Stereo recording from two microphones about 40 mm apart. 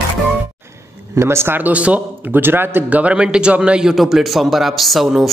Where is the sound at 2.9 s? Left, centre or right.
Right.